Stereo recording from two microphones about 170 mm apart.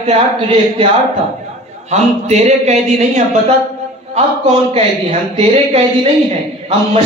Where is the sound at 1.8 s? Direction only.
40° right (ahead or behind).